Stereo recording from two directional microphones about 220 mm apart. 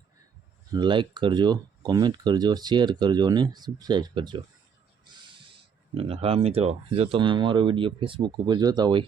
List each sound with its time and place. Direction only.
0.7 s speech: 20° right (ahead or behind)
5.9 s speech: 25° right (ahead or behind)